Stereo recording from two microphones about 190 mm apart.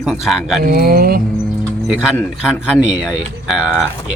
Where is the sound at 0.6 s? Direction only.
50° right (ahead or behind).